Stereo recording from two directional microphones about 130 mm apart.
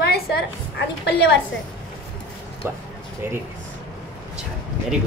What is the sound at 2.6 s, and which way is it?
Speech, 20° right (ahead or behind).